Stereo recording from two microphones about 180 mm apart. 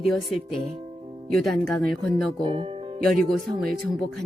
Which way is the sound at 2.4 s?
30° right (ahead or behind).